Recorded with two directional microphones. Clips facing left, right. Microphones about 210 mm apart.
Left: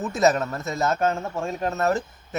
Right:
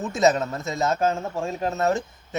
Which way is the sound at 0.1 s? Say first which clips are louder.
Right 1 dB; 20° right (ahead or behind).